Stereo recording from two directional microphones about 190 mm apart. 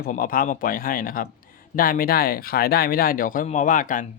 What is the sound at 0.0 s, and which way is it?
A man's voice, 45° left (ahead or behind).